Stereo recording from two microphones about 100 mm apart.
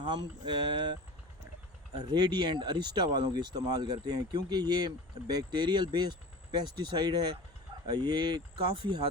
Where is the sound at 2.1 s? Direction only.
45° right (ahead or behind).